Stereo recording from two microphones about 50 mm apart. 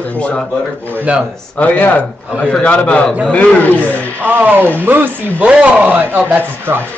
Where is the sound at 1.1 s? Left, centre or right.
Right.